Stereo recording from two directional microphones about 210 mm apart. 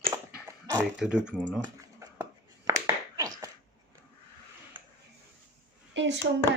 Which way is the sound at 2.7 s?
15° right (ahead or behind).